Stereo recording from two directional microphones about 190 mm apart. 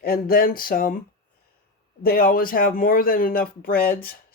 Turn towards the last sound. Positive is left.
turn(degrees=50)  # may be behind; listen again after turning